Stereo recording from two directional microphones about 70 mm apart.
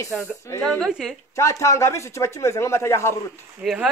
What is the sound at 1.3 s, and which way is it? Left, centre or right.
A man's voice, left.